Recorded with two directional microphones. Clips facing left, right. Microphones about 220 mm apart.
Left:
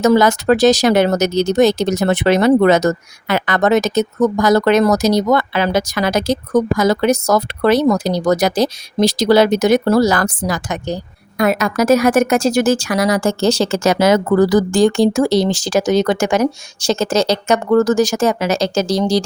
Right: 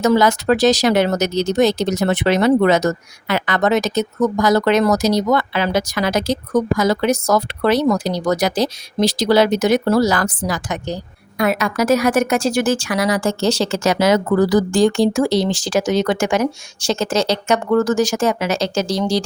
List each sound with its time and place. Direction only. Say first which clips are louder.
0.0 s speech: left 3 dB; 45° left (ahead or behind)